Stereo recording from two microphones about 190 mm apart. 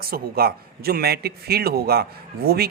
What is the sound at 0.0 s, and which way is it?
A man's voice, 55° right (ahead or behind).